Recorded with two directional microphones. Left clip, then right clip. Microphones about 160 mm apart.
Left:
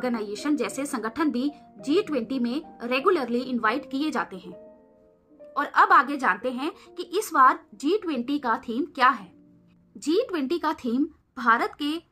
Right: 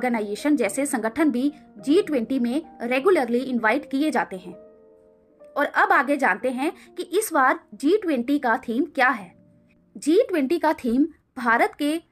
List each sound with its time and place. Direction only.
0.0 s a woman's voice: 30° right (ahead or behind)
5.5 s a woman's voice: 25° right (ahead or behind)